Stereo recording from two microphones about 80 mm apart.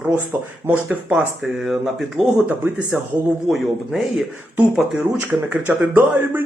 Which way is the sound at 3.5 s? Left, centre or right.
Centre.